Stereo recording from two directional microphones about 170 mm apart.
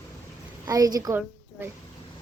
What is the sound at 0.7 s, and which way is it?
Speech, 20° right (ahead or behind).